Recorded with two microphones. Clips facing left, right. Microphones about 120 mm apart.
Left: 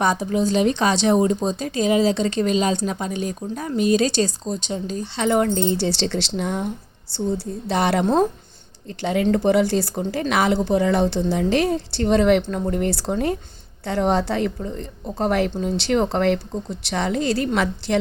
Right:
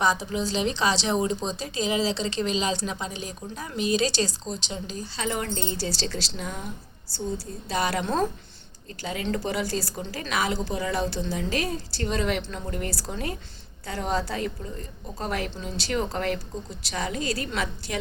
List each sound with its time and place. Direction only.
0.0 s a woman's voice: 50° left (ahead or behind)
5.0 s speech: 60° left (ahead or behind)